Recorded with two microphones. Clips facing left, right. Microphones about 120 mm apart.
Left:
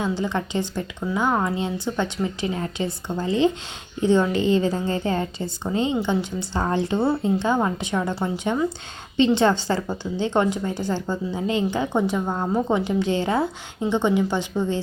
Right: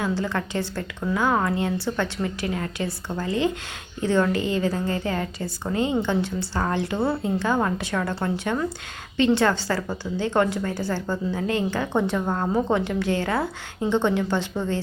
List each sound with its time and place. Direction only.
0.0 s a woman's voice: 20° left (ahead or behind)